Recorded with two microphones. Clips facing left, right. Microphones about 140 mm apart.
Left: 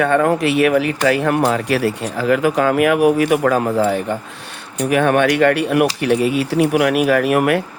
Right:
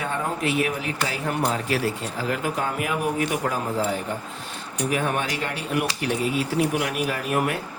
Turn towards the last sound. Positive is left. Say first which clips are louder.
# left 10 dB
turn(degrees=75)  # may be behind; listen again after turning